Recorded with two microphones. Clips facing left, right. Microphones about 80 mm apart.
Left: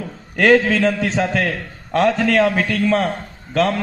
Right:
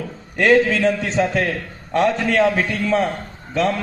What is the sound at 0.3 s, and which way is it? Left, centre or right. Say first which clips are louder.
A man's voice: left 1 dB; left.